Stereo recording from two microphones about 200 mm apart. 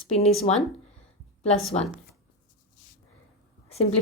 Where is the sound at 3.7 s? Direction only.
30° left (ahead or behind).